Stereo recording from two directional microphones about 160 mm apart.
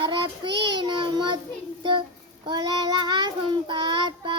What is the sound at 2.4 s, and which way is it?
Child singing, 25° right (ahead or behind).